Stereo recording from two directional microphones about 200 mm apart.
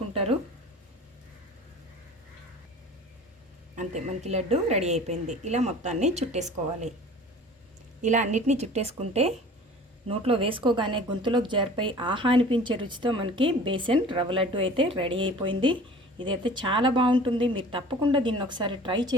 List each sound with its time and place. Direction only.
0.1 s a sound: 30° right (ahead or behind)
3.8 s a woman's voice: 35° right (ahead or behind)
8.0 s a woman's voice: 35° right (ahead or behind)